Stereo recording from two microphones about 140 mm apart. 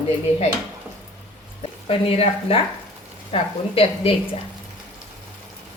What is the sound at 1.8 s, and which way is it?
A woman's voice, 45° left (ahead or behind).